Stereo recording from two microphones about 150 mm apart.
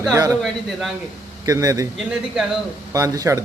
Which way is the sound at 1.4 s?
20° right (ahead or behind).